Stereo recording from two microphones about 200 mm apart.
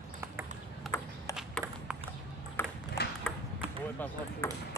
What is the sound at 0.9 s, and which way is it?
Ping, 10° left (ahead or behind).